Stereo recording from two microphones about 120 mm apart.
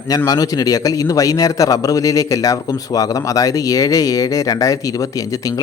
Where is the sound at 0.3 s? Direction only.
30° left (ahead or behind).